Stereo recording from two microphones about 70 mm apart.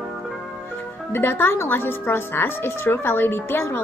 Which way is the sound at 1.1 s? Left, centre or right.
Left.